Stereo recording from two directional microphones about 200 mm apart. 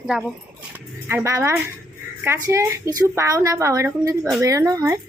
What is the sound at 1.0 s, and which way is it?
A woman's voice, 10° right (ahead or behind).